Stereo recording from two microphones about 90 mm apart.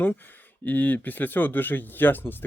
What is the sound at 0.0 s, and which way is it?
Speech, 20° left (ahead or behind).